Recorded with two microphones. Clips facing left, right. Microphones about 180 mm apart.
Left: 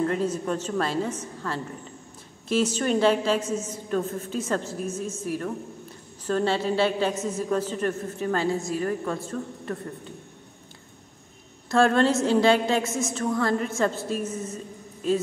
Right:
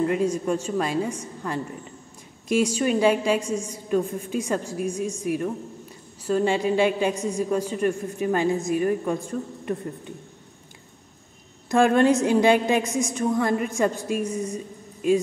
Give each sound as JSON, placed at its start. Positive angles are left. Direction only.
{"t": 0.0, "sound": "a woman's voice", "side_deg": -10}
{"t": 11.7, "sound": "a woman's voice", "side_deg": -15}